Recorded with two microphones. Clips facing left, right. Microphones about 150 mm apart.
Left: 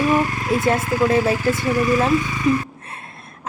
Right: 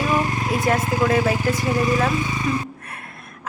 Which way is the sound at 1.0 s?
30° left (ahead or behind).